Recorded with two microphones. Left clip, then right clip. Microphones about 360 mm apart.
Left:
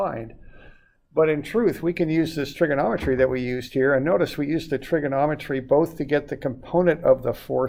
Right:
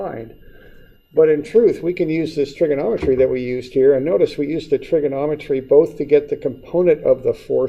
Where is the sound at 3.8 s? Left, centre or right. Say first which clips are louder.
Right 6 dB; left.